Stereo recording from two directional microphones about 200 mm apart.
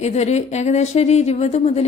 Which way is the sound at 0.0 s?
35° left (ahead or behind).